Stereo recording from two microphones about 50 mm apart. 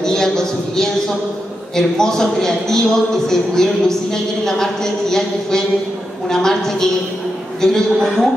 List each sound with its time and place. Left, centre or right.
0.0 s a man's voice: centre